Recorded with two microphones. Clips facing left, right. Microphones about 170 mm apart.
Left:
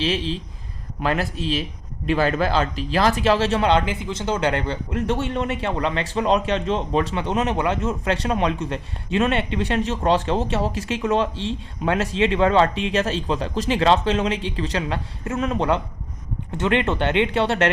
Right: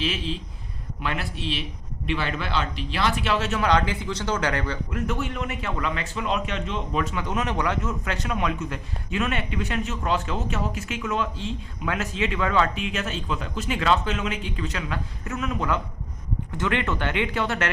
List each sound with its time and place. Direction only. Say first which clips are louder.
0.0 s speech: left 5 dB; 35° left (ahead or behind)